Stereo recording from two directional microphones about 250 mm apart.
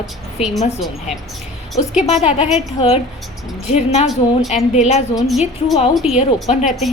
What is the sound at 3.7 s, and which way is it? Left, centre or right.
A woman's voice, left.